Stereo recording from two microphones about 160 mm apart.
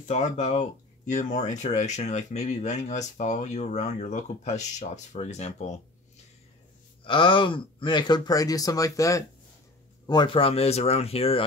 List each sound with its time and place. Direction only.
0.1 s speech: 45° left (ahead or behind)
7.1 s speech: 30° left (ahead or behind)